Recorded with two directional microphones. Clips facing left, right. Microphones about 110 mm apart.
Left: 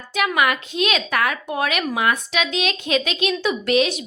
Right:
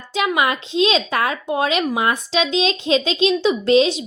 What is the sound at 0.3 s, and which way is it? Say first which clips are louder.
A woman's voice: right 1 dB; 25° right (ahead or behind).